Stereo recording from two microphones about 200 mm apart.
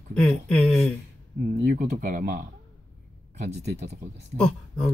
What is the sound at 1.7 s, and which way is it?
Speech, 45° right (ahead or behind).